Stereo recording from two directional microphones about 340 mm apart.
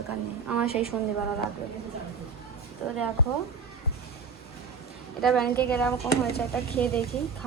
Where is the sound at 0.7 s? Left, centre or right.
Centre.